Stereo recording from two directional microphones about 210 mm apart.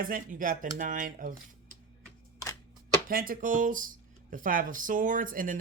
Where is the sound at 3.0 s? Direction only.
45° right (ahead or behind).